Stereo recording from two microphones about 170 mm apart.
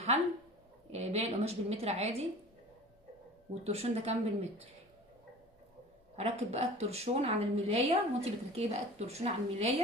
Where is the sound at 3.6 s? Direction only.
35° right (ahead or behind).